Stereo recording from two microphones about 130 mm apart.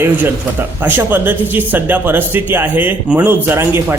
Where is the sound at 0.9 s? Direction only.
15° right (ahead or behind).